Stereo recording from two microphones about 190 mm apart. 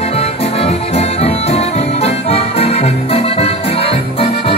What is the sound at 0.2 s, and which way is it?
Music, 35° left (ahead or behind).